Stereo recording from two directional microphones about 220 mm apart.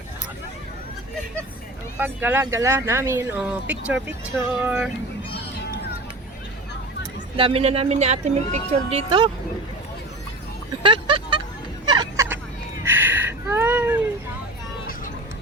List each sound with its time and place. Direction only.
2.0 s speech: 10° right (ahead or behind)
7.0 s speech: 25° right (ahead or behind)
10.8 s vehicle: 20° right (ahead or behind)
12.8 s a sound: 10° right (ahead or behind)